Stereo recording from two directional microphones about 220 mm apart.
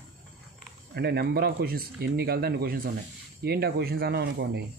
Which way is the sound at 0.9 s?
45° right (ahead or behind).